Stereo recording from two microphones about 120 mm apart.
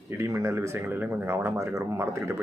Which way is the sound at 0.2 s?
25° right (ahead or behind).